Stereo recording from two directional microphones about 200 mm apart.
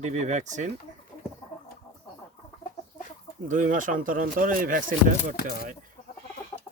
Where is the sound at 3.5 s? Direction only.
40° right (ahead or behind).